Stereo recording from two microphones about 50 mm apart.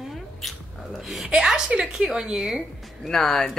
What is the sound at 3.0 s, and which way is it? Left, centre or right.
Speech, centre.